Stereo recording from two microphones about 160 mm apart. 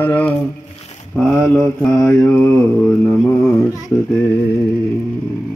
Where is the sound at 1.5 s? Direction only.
5° left (ahead or behind).